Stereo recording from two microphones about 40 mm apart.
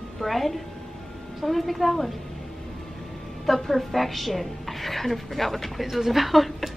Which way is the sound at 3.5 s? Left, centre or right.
Centre.